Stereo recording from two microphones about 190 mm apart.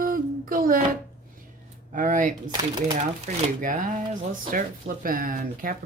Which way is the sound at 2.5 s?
25° right (ahead or behind).